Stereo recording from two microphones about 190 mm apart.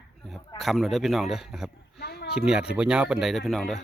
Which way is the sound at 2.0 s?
55° left (ahead or behind).